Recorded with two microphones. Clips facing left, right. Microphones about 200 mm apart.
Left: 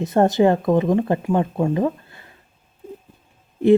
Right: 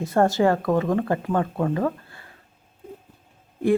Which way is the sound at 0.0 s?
20° left (ahead or behind).